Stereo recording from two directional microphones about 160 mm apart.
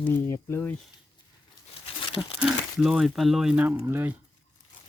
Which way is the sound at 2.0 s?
35° left (ahead or behind).